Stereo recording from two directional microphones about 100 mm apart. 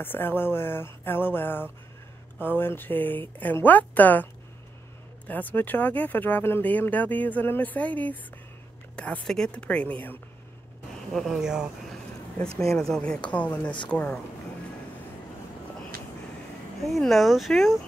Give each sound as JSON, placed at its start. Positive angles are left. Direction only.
{"t": 0.0, "sound": "a woman's voice", "side_deg": 20}
{"t": 11.1, "sound": "speech", "side_deg": -5}
{"t": 12.5, "sound": "speech", "side_deg": 5}
{"t": 16.8, "sound": "speech", "side_deg": 0}